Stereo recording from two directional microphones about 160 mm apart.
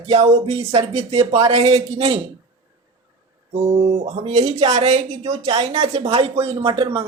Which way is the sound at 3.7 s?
40° right (ahead or behind).